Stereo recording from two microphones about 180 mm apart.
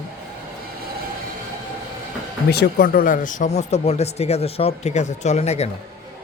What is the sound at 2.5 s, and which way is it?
Speech, 60° left (ahead or behind).